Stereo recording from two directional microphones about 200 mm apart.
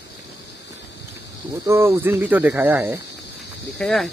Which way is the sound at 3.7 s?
Centre (ahead or behind).